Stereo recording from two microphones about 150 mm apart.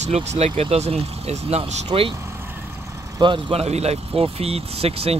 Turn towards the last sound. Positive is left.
turn(degrees=-40)  # may be behind; listen again after turning